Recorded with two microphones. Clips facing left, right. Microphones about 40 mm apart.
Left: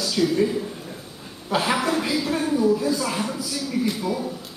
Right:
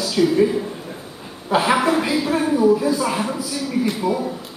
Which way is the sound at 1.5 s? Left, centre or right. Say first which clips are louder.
Right 5 dB; centre.